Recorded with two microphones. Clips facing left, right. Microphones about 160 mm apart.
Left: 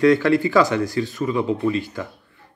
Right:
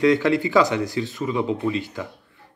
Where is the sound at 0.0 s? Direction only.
20° right (ahead or behind).